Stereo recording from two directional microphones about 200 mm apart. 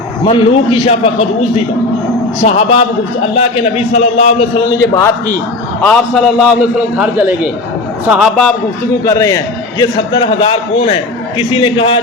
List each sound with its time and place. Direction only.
0.3 s a man's voice: 25° left (ahead or behind)
4.8 s a man's voice: 15° left (ahead or behind)
5.8 s a man's voice: 5° left (ahead or behind)
9.0 s a man's voice: 15° left (ahead or behind)